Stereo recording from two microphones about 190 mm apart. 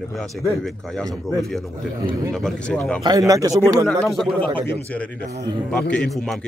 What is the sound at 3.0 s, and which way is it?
Speech, 20° right (ahead or behind).